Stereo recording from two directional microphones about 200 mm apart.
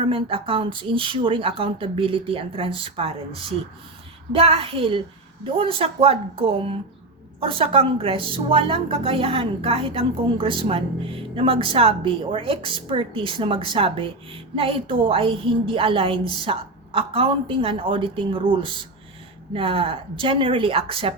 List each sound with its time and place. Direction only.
0.0 s a woman's voice: 25° right (ahead or behind)
4.3 s a woman's voice: 30° right (ahead or behind)